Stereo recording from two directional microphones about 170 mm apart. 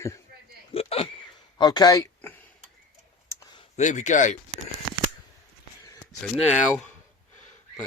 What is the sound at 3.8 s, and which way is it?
Speech, 45° left (ahead or behind).